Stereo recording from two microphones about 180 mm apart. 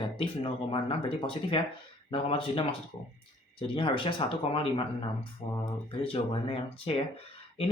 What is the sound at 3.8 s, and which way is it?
Speech, 30° left (ahead or behind).